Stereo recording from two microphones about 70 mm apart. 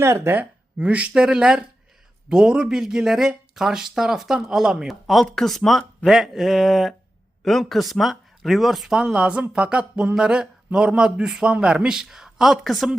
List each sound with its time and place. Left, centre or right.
0.0 s speech: right
0.3 s speech: right; by 9.0 s centre
9.0 s speech: centre